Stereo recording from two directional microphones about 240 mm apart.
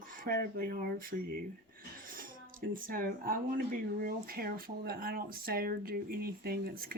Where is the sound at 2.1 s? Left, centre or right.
Right.